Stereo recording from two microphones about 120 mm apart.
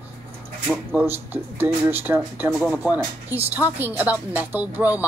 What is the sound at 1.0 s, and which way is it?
A woman's voice, 15° right (ahead or behind).